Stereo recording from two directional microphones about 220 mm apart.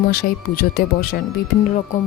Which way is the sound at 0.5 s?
40° left (ahead or behind).